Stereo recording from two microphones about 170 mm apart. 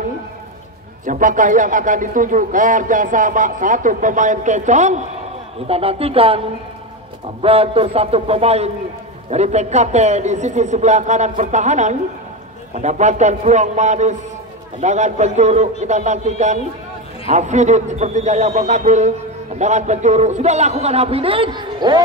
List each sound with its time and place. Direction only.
1.0 s a man's voice: 50° right (ahead or behind); by 6.4 s 35° right (ahead or behind)
7.4 s a man's voice: 35° right (ahead or behind)